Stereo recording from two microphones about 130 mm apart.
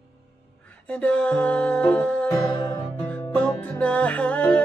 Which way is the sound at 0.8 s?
10° left (ahead or behind).